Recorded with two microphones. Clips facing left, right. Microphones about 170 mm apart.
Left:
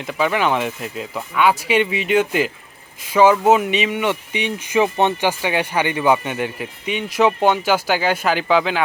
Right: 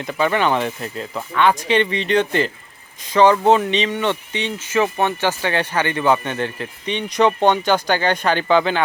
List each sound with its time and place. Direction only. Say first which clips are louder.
0.0 s speech: right 1 dB; centre (ahead or behind)